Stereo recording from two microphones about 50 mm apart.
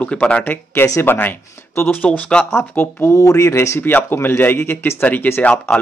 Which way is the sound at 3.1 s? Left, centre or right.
Left.